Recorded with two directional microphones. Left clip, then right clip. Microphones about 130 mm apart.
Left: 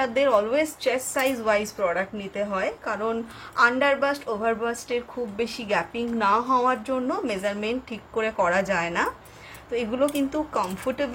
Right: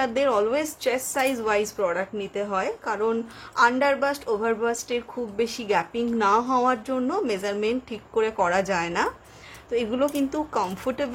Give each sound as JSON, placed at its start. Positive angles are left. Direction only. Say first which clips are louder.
{"t": 0.0, "sound": "a woman's voice", "louder": "left 1 dB", "side_deg": -60}